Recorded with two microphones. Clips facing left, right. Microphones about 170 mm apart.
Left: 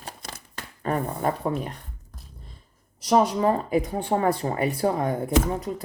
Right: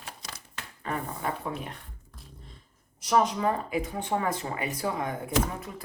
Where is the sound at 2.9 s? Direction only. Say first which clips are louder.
Left 4 dB; 30° left (ahead or behind).